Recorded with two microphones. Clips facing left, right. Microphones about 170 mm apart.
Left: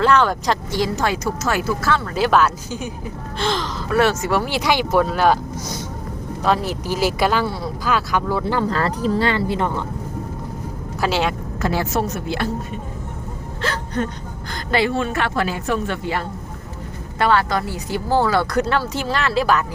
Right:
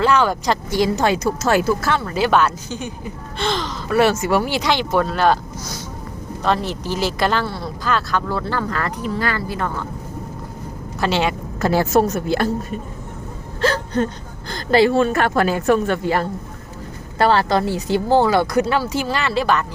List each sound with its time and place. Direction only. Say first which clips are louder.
0.0 s a woman's voice: even; 5° right (ahead or behind)
0.7 s speech: right 7 dB; 20° right (ahead or behind)
2.0 s a woman's voice: even; centre (ahead or behind)
6.4 s speech: even; 5° left (ahead or behind)
8.7 s speech: left 4 dB; 30° left (ahead or behind)
11.0 s a woman's voice: right 1 dB; centre (ahead or behind)
11.6 s a woman's voice: right 5 dB; 40° right (ahead or behind)
13.6 s a woman's voice: right 5 dB; 35° right (ahead or behind)
17.2 s speech: right 2 dB; 30° right (ahead or behind); by 19.6 s centre (ahead or behind)